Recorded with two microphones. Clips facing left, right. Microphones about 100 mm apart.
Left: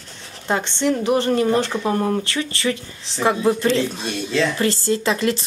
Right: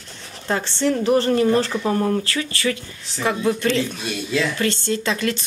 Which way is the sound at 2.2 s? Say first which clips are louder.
Even; 25° left (ahead or behind).